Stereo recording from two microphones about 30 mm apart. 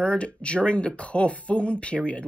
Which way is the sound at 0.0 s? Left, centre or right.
Left.